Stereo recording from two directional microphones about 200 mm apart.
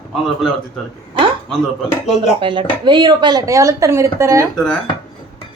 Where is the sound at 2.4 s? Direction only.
25° right (ahead or behind).